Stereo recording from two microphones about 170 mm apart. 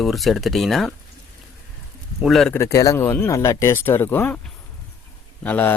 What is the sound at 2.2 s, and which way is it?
Speech, centre (ahead or behind).